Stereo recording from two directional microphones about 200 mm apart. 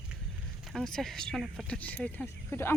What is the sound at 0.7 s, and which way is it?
Speech, centre (ahead or behind).